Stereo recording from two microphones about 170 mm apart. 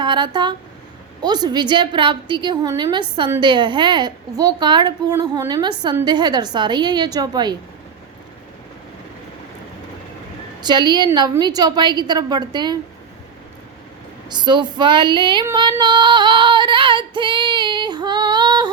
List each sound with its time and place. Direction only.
0.0 s a woman's voice: 25° right (ahead or behind)
10.6 s a woman's voice: 25° right (ahead or behind)
14.3 s a woman's voice: 25° right (ahead or behind)
15.8 s female singing: 25° right (ahead or behind)